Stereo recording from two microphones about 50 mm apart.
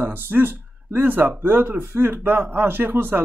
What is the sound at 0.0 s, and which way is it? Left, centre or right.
Speech, right.